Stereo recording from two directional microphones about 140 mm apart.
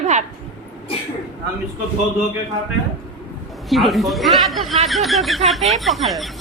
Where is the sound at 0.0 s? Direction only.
60° right (ahead or behind).